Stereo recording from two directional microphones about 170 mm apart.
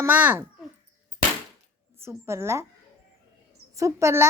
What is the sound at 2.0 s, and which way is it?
Speech, 15° right (ahead or behind).